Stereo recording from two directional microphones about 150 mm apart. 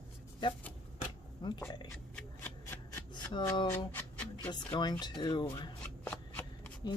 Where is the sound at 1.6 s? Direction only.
20° left (ahead or behind).